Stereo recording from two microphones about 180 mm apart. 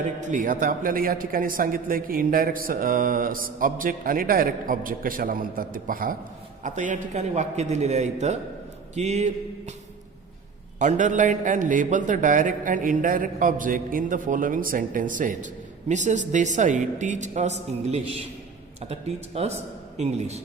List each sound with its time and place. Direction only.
0.2 s a man's voice: 45° right (ahead or behind)
10.8 s a man's voice: 45° right (ahead or behind)